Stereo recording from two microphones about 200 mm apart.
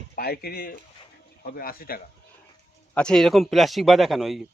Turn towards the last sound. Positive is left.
turn(degrees=0)  # may be behind; listen again after turning